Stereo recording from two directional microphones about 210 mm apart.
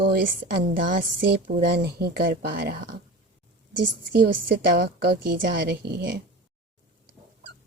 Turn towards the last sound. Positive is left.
turn(degrees=-55)  # may be behind; listen again after turning